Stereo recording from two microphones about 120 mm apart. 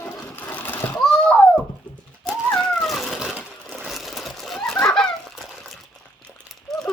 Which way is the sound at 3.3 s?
5° left (ahead or behind).